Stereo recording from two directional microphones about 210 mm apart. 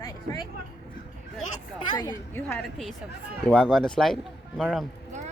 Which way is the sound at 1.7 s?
20° left (ahead or behind).